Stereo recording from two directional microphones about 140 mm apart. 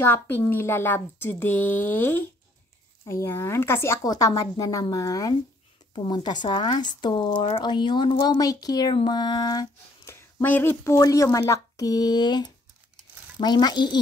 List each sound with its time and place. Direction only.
0.0 s a woman's voice: 15° left (ahead or behind)
10.4 s a woman's voice: 15° left (ahead or behind); by 13.9 s 30° left (ahead or behind)